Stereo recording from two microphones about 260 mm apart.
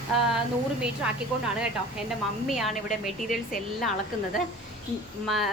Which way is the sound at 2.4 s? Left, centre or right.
Centre.